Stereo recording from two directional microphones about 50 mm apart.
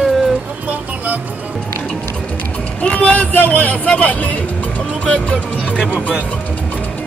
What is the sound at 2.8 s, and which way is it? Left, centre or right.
Speech, left.